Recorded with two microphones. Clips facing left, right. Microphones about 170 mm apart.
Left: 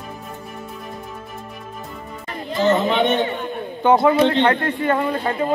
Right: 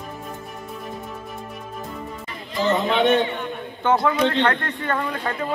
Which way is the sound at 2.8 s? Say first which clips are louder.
Even; centre (ahead or behind).